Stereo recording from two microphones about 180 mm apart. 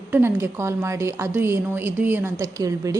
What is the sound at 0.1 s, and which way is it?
A woman's voice, 15° right (ahead or behind).